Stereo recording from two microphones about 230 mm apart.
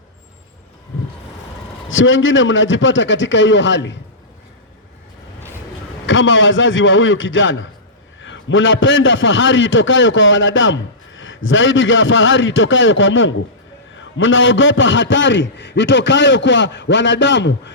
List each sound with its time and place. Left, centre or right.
1.9 s a man's voice: left
6.1 s a man's voice: left